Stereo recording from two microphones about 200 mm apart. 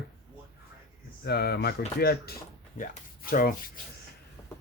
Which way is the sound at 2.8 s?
45° left (ahead or behind).